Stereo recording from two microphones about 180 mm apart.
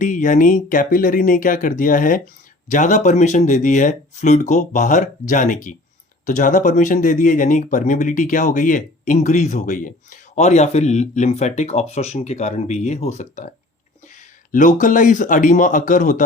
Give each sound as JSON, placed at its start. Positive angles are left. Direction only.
{"t": 0.0, "sound": "speech", "side_deg": 45}
{"t": 14.5, "sound": "speech", "side_deg": 45}